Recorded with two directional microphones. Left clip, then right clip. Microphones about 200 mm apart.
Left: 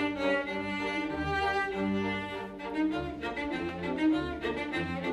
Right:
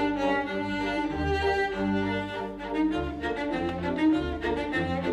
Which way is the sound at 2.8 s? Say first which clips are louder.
Right 4 dB; 15° right (ahead or behind).